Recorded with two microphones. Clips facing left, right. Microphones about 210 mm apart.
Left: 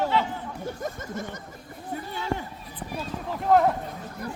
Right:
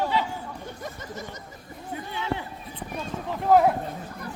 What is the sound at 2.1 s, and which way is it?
Run, 45° left (ahead or behind).